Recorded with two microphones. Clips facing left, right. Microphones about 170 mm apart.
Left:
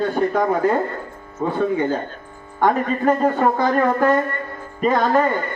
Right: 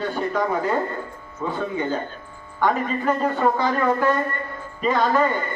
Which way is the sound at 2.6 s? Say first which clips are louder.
Left 4 dB; 50° left (ahead or behind).